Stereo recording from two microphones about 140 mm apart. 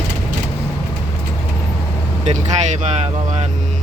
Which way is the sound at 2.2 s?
55° right (ahead or behind).